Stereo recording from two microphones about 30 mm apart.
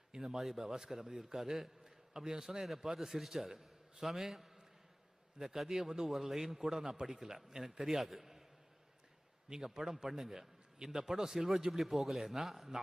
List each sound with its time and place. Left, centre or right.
0.1 s a sound: centre
0.3 s a man's voice: centre
5.5 s a man's voice: centre
9.5 s a man's voice: centre